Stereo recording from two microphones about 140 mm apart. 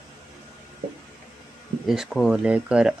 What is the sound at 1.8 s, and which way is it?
Speech, 5° right (ahead or behind).